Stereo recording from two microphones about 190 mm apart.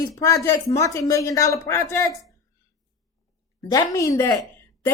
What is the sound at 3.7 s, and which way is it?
Speech, 20° left (ahead or behind).